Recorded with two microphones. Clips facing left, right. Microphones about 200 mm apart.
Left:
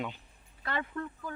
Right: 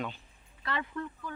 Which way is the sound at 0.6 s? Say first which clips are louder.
Even; 45° left (ahead or behind).